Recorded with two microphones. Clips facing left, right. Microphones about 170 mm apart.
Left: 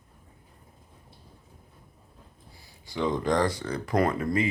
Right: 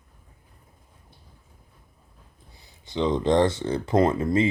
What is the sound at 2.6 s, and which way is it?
Speech, 20° right (ahead or behind).